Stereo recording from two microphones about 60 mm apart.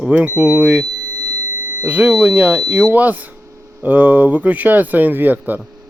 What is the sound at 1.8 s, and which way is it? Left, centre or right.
Speech, right.